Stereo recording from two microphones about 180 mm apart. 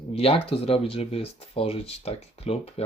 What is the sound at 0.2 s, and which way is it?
Speech, 30° left (ahead or behind).